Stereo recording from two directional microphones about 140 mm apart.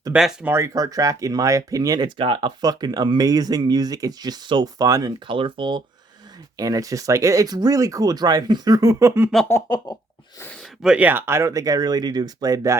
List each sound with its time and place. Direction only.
0.1 s speech: 5° right (ahead or behind)
0.5 s speech: 25° right (ahead or behind)
5.3 s speech: 35° right (ahead or behind); by 9.3 s 20° right (ahead or behind)
9.5 s a sound: 25° left (ahead or behind)
10.8 s speech: 10° right (ahead or behind); by 12.7 s 25° right (ahead or behind)